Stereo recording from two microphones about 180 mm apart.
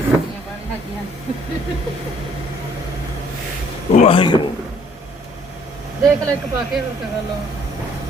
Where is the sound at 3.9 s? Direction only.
30° left (ahead or behind).